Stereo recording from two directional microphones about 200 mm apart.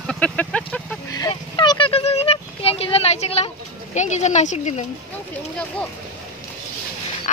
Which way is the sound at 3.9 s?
35° left (ahead or behind).